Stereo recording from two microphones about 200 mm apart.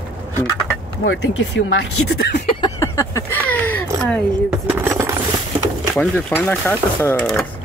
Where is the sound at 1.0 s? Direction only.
85° left; by 2.3 s 60° left (ahead or behind).